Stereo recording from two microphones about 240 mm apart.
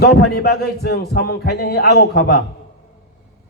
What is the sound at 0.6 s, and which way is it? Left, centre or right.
A man's voice, left.